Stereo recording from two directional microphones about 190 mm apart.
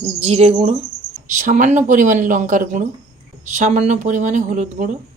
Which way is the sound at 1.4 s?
40° right (ahead or behind).